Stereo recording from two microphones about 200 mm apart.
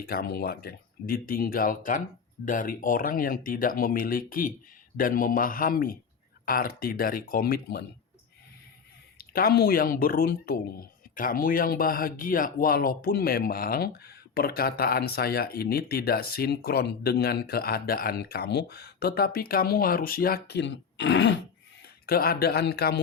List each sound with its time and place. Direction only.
0.0 s speech: 50° left (ahead or behind)
9.1 s speech: 50° left (ahead or behind)
22.0 s speech: 50° left (ahead or behind)